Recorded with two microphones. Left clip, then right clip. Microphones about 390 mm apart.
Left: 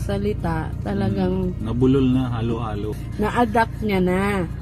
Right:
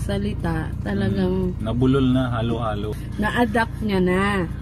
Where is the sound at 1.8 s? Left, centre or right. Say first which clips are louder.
Left 1 dB; centre.